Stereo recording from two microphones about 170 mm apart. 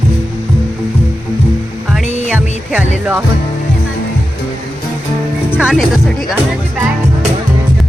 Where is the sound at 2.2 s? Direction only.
10° right (ahead or behind).